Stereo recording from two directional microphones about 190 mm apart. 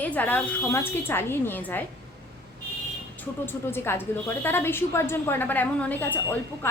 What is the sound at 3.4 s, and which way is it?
A woman's voice, 10° left (ahead or behind).